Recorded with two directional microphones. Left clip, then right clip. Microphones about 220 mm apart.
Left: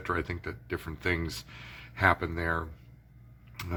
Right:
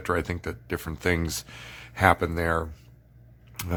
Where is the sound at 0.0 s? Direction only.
50° right (ahead or behind).